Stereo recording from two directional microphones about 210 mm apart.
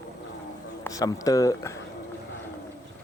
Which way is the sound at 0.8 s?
15° left (ahead or behind).